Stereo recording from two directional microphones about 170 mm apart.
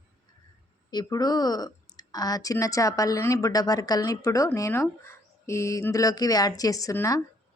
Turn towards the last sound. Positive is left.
turn(degrees=20)  # may be behind; listen again after turning